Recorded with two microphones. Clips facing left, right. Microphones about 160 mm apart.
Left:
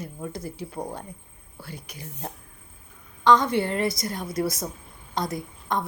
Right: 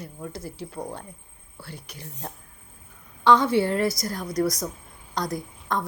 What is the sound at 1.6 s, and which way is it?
Speech, 10° left (ahead or behind).